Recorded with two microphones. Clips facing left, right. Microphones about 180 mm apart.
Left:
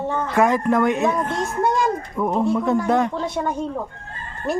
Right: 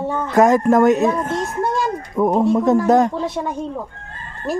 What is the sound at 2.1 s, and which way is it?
Speech, 40° right (ahead or behind).